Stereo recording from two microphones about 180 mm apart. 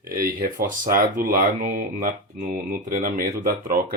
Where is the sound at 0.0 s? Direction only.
55° right (ahead or behind).